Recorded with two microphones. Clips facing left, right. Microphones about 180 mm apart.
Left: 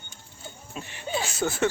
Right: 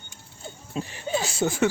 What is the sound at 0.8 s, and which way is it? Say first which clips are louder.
Speech: right 8 dB; 25° right (ahead or behind).